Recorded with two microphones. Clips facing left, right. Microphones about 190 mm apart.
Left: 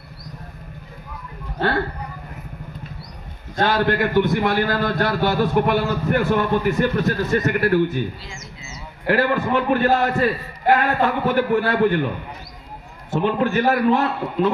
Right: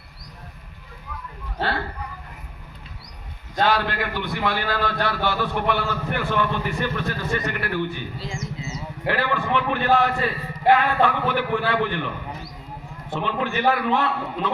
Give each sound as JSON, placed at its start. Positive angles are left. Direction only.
{"t": 3.6, "sound": "a man's voice", "side_deg": 45}
{"t": 9.0, "sound": "a man's voice", "side_deg": 45}
{"t": 13.1, "sound": "a man's voice", "side_deg": 45}